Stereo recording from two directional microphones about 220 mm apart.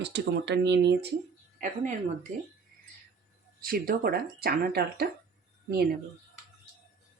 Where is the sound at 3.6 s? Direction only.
40° right (ahead or behind).